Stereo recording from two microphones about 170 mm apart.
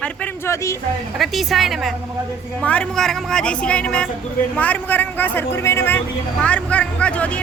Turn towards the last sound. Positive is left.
turn(degrees=10)  # may be behind; listen again after turning